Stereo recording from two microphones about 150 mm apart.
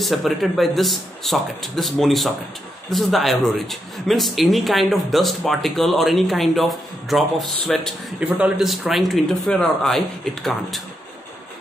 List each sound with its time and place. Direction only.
0.0 s speech: centre (ahead or behind)